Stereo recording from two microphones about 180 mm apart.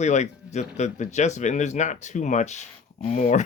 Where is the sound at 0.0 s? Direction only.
40° left (ahead or behind).